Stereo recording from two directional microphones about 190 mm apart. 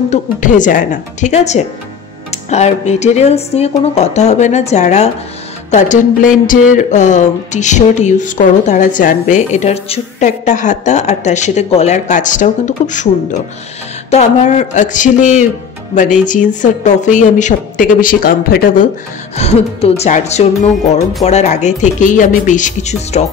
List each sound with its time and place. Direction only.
0.1 s speech: 40° left (ahead or behind)
19.3 s speech: 35° left (ahead or behind)